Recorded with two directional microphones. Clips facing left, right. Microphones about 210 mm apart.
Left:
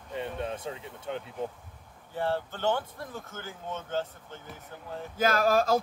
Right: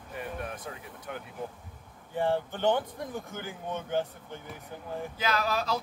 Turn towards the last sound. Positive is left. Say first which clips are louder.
# left 6 dB
turn(degrees=50)  # may be behind; listen again after turning